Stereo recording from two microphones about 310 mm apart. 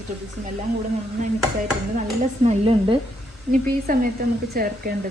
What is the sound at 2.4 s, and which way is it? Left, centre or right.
Speech, centre.